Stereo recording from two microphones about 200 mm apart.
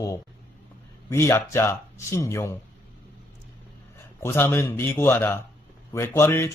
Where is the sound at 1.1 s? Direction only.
15° left (ahead or behind).